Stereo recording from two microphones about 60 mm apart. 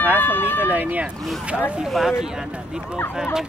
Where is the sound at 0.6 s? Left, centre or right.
Right.